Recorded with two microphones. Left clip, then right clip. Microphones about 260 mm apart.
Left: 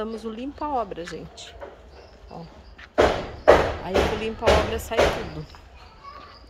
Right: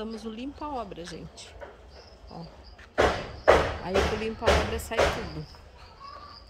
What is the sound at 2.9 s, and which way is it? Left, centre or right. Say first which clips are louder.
Thump: left 4 dB; left.